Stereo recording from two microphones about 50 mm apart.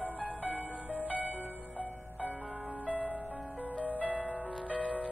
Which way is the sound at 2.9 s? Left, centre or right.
Right.